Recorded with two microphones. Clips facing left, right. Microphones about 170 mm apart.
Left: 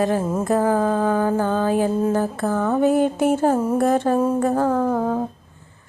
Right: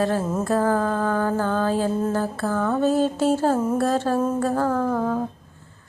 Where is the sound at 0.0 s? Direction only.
15° left (ahead or behind).